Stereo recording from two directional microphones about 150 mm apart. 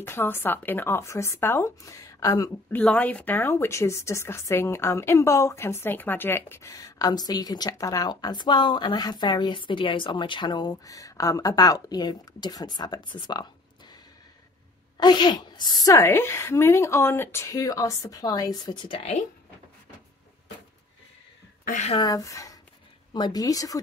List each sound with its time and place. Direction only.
0.0 s speech: 15° left (ahead or behind)
2.7 s speech: 5° left (ahead or behind); by 13.9 s 30° left (ahead or behind)
15.0 s speech: 30° left (ahead or behind)
21.6 s a woman's voice: 55° left (ahead or behind)
21.9 s speech: 25° left (ahead or behind)